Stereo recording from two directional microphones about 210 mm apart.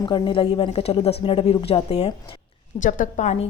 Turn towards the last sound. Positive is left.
turn(degrees=35)  # may be behind; listen again after turning